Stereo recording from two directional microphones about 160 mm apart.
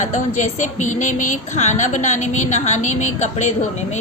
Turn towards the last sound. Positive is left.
turn(degrees=45)  # may be behind; listen again after turning